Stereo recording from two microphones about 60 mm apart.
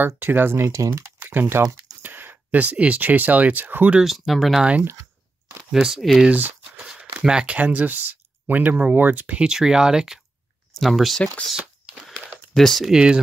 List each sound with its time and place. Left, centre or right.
0.0 s speech: right
1.2 s speech: right
4.0 s speech: centre
4.6 s speech: centre
5.7 s speech: centre
7.0 s a sound: centre
7.5 s speech: right
9.4 s speech: centre
12.5 s speech: centre
12.8 s speech: centre